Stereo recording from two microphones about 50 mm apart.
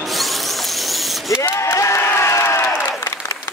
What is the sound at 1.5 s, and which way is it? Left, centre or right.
Crowd, left.